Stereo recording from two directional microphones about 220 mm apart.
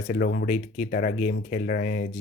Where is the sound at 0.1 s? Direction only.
45° left (ahead or behind).